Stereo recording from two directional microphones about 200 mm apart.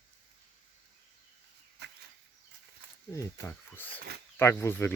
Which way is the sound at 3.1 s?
15° left (ahead or behind).